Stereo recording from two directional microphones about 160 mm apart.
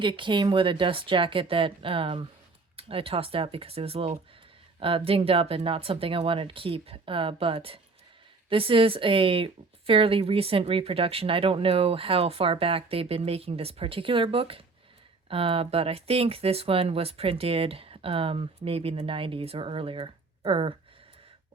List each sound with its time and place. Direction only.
0.0 s speech: 30° right (ahead or behind)